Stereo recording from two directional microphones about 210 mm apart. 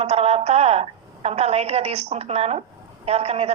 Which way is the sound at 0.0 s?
30° right (ahead or behind).